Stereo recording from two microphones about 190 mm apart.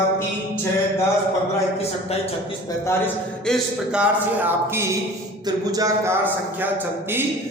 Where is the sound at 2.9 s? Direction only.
5° left (ahead or behind).